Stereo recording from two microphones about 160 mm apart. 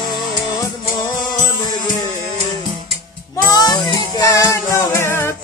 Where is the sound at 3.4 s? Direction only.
25° left (ahead or behind).